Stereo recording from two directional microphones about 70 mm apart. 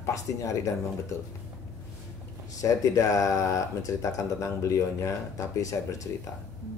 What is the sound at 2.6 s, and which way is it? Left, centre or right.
Speech, left.